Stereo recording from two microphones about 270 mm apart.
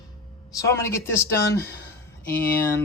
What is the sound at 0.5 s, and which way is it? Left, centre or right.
Speech, centre.